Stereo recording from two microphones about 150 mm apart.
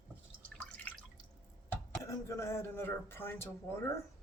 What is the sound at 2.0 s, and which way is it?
Speech, 20° left (ahead or behind).